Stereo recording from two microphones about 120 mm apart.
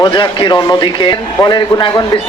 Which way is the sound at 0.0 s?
45° left (ahead or behind).